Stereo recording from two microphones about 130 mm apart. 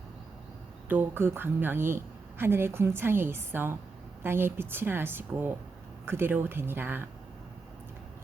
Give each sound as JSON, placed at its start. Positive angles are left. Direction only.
{"t": 0.9, "sound": "a woman's voice", "side_deg": -15}